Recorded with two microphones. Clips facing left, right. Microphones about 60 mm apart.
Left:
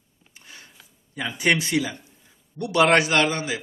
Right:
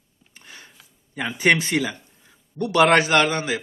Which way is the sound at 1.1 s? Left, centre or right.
Right.